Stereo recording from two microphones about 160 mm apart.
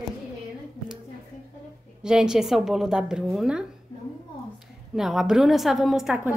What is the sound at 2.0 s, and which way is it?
A woman's voice, 5° right (ahead or behind).